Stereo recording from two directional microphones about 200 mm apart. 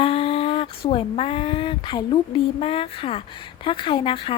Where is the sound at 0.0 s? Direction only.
30° left (ahead or behind).